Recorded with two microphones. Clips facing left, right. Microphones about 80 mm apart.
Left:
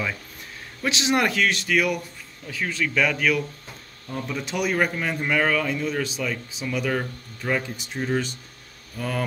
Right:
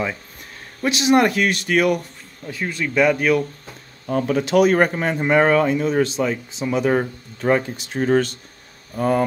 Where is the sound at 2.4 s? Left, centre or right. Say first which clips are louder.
Right 2 dB; right.